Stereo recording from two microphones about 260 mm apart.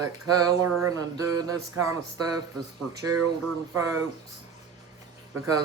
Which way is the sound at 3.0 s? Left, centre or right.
Right.